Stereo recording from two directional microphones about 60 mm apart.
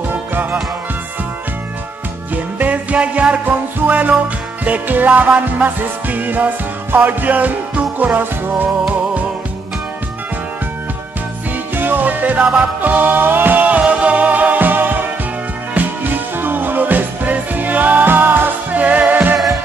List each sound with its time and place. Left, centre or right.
0.1 s music: right
2.3 s music: right
11.7 s music: right
18.8 s music: right